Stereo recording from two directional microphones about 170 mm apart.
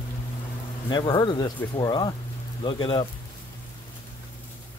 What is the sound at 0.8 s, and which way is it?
Speech, 25° left (ahead or behind).